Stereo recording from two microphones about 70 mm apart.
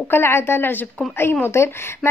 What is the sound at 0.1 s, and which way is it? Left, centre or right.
A woman's voice, left.